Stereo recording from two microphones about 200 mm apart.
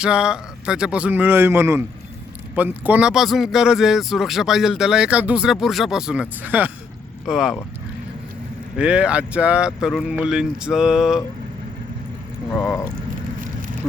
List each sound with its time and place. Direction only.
0.0 s speech: 5° right (ahead or behind)
8.8 s speech: 5° right (ahead or behind)
12.5 s speech: centre (ahead or behind)